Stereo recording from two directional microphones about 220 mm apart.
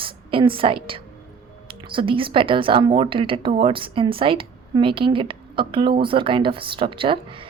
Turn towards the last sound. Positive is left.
turn(degrees=-25)  # may be behind; listen again after turning